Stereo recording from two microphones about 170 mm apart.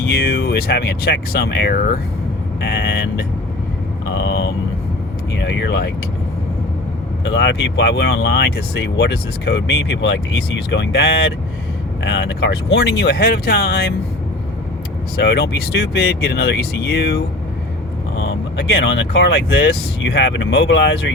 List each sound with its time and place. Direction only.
0.3 s speech: 60° left (ahead or behind)
2.6 s speech: 75° left (ahead or behind)
4.0 s vehicle: 90° left
5.3 s speech: 90° left
7.3 s speech: 90° left; by 13.9 s 60° left (ahead or behind)
15.2 s speech: 70° left (ahead or behind)
18.2 s speech: 90° left